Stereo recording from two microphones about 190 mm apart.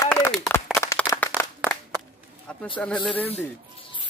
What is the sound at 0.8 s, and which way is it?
Clapping, 15° left (ahead or behind).